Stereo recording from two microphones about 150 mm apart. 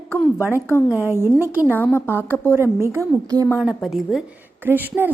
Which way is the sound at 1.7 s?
15° left (ahead or behind).